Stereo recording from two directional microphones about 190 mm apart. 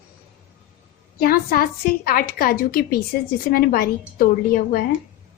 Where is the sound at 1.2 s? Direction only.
55° left (ahead or behind).